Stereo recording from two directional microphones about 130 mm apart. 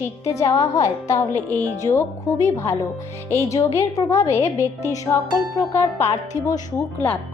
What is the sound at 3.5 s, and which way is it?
Music, 25° left (ahead or behind).